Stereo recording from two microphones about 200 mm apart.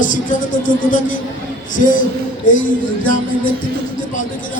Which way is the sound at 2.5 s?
40° left (ahead or behind).